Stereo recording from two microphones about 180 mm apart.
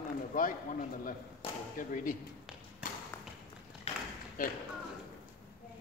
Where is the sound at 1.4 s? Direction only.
30° left (ahead or behind).